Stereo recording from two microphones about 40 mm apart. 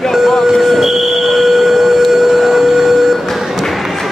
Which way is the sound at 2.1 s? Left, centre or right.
Centre.